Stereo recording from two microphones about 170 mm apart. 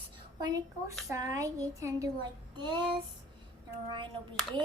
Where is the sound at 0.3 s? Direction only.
25° right (ahead or behind).